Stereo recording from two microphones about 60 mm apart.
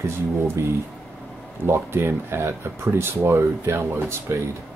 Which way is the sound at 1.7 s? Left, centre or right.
Right.